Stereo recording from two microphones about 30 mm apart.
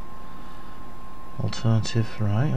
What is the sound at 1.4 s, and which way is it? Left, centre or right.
Speech, centre.